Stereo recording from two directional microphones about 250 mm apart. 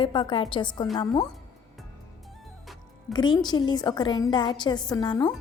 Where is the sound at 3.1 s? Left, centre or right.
Centre.